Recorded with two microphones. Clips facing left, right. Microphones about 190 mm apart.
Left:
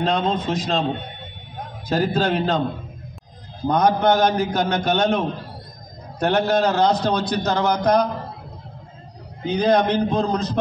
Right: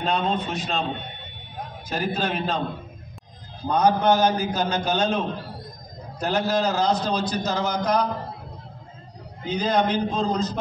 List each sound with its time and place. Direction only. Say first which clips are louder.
0.0 s a man's voice: left 3 dB; 90° left
1.9 s a man's voice: left 6 dB; 70° left (ahead or behind)
3.6 s a man's voice: left 2 dB; 65° left (ahead or behind)
9.6 s a man's voice: left 4 dB; 65° left (ahead or behind)